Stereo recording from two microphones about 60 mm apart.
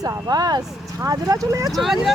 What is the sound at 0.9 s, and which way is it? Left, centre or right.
Speech, right.